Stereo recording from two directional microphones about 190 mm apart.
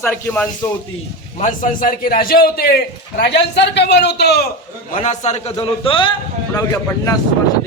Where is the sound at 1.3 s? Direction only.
45° left (ahead or behind).